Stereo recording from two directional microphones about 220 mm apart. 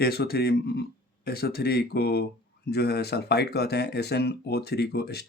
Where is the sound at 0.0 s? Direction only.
45° left (ahead or behind).